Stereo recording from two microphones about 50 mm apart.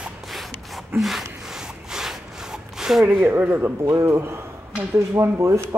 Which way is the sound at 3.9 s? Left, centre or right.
Right.